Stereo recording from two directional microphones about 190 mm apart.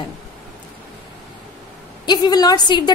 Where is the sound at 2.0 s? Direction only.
20° left (ahead or behind).